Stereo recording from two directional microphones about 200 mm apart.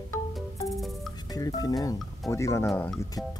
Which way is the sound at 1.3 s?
20° left (ahead or behind).